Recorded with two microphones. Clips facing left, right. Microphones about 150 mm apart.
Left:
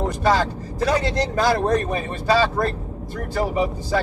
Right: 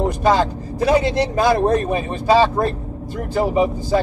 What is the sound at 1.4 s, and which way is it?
Speech, 20° right (ahead or behind).